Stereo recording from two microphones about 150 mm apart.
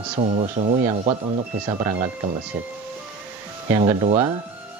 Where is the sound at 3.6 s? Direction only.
20° right (ahead or behind).